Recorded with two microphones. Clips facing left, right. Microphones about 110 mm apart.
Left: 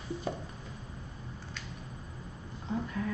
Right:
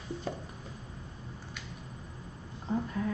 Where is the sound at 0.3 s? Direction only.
10° left (ahead or behind).